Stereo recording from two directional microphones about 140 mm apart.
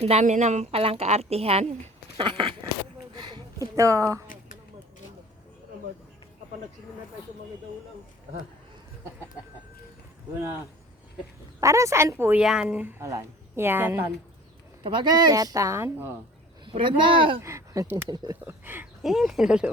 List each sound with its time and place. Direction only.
0.0 s a woman's voice: 50° right (ahead or behind)
2.2 s speech: 35° right (ahead or behind)
3.2 s a sound: 30° right (ahead or behind)
3.8 s a woman's voice: 20° right (ahead or behind)
11.6 s a woman's voice: 20° right (ahead or behind)
14.8 s a woman's voice: 35° right (ahead or behind); by 16.1 s 15° right (ahead or behind)
16.6 s speech: 35° right (ahead or behind)
17.4 s a woman's voice: 20° right (ahead or behind)
18.3 s a woman's voice: 15° right (ahead or behind)
19.0 s speech: centre (ahead or behind)